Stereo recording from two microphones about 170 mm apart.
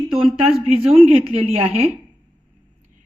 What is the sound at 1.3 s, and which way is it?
Speech, 35° right (ahead or behind).